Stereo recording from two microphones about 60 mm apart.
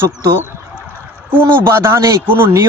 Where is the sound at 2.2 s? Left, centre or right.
Right.